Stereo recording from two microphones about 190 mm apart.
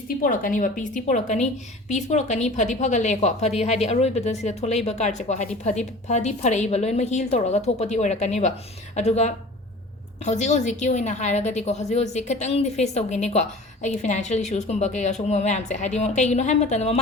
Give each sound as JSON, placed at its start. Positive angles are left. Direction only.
{"t": 0.2, "sound": "a woman's voice", "side_deg": 45}